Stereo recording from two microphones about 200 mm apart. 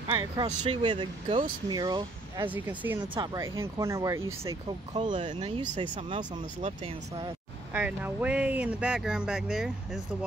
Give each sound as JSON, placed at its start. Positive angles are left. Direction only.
{"t": 0.1, "sound": "speech", "side_deg": -25}
{"t": 0.5, "sound": "speech", "side_deg": -40}
{"t": 0.8, "sound": "speech", "side_deg": -25}
{"t": 7.7, "sound": "speech", "side_deg": -10}